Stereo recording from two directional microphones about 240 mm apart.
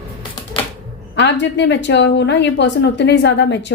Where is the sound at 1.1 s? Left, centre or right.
Left.